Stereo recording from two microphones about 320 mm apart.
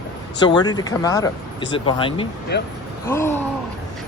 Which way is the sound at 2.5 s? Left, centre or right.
Left.